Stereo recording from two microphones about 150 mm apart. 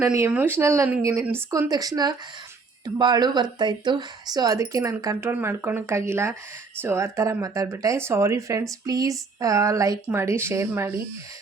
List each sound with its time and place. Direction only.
0.0 s speech: 15° right (ahead or behind)